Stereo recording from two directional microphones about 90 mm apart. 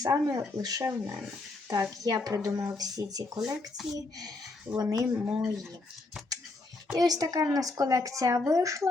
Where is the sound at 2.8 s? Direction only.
45° right (ahead or behind).